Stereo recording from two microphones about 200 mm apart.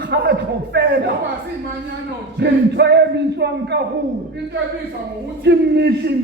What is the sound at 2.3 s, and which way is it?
A man's voice, 60° right (ahead or behind).